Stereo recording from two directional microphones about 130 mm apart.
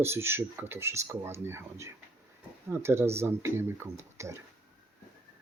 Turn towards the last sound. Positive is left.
turn(degrees=-20)  # may be behind; listen again after turning